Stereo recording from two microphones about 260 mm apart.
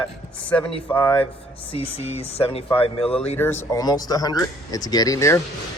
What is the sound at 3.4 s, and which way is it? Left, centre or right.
Speech, centre.